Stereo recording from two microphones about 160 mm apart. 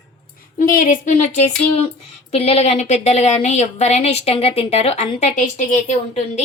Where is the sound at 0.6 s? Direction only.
60° left (ahead or behind).